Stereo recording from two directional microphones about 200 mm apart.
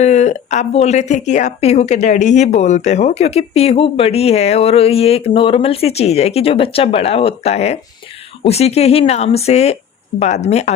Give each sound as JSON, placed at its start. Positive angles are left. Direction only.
{"t": 0.0, "sound": "a woman's voice", "side_deg": 35}